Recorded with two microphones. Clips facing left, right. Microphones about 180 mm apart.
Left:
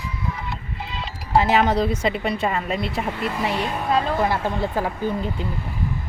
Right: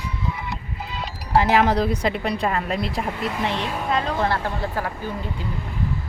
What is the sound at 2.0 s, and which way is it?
A woman's voice, centre (ahead or behind).